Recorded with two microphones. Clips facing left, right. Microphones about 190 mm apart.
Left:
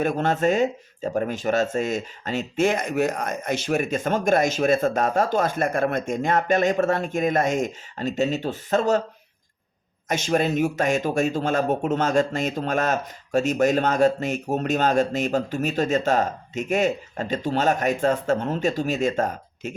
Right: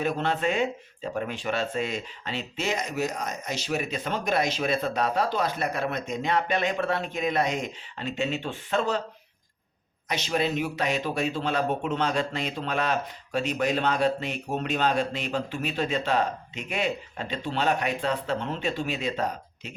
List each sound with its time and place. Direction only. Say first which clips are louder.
0.0 s speech: left 5 dB; 45° left (ahead or behind)
10.1 s speech: left 5 dB; 45° left (ahead or behind)